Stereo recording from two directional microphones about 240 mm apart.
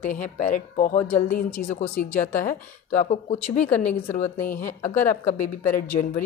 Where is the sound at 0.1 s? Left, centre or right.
Left.